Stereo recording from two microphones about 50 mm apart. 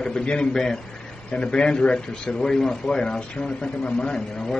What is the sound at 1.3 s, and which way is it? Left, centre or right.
A man's voice, centre.